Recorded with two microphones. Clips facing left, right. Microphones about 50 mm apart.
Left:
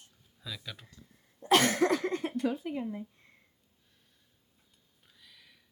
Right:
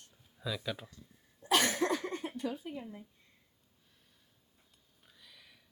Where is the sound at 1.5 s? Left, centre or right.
Left.